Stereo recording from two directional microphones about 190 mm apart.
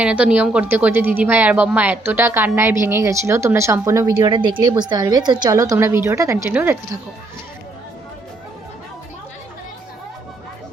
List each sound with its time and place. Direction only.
0.0 s a woman's voice: 5° right (ahead or behind)